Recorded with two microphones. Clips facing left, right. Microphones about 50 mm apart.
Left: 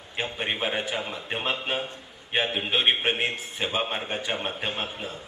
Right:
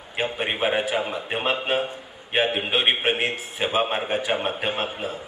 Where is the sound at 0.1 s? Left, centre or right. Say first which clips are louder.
Right 4 dB; centre.